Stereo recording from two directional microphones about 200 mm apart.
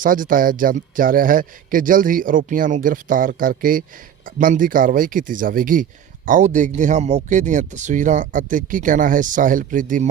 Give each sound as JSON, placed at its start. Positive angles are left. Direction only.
{"t": 0.0, "sound": "a man's voice", "side_deg": -45}